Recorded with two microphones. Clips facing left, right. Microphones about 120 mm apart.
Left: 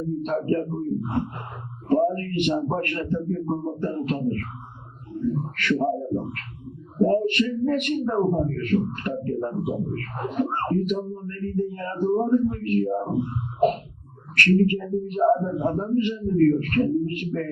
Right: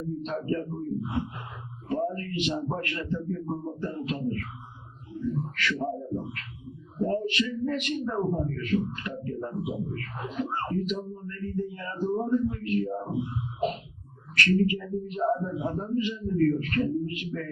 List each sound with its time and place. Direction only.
0.0 s a man's voice: 50° left (ahead or behind)
3.8 s a man's voice: 55° left (ahead or behind)